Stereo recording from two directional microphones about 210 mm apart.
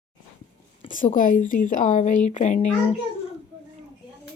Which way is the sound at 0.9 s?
40° left (ahead or behind).